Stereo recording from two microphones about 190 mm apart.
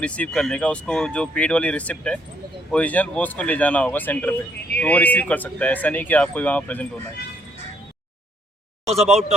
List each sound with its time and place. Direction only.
0.0 s speech: 5° left (ahead or behind)
8.9 s speech: 35° right (ahead or behind)